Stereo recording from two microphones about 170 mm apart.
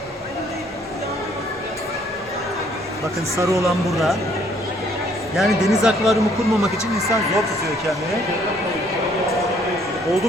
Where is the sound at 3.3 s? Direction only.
15° right (ahead or behind).